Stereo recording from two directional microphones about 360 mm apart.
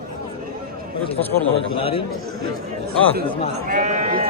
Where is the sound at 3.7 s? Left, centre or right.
Centre.